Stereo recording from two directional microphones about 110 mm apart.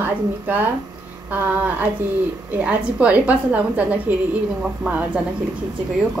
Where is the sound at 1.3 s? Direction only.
15° right (ahead or behind).